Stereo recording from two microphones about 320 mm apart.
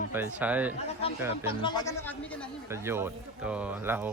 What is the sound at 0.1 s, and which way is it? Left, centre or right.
Speech, centre.